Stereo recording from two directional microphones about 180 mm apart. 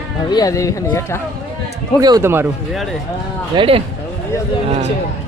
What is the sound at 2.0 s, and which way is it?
Speech, 20° right (ahead or behind).